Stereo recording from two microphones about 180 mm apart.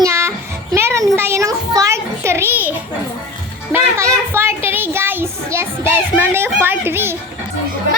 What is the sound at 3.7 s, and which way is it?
A child's voice, 15° right (ahead or behind).